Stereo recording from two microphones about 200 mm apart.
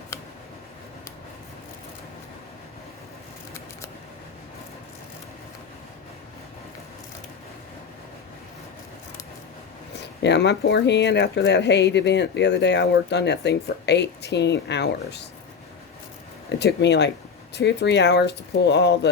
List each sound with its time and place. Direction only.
0.1 s a sound: 15° left (ahead or behind)
9.9 s speech: 60° left (ahead or behind)
16.6 s speech: 60° left (ahead or behind)